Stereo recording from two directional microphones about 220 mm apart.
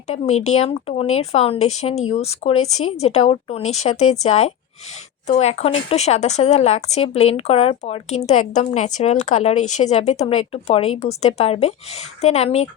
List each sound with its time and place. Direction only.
0.1 s speech: 30° left (ahead or behind)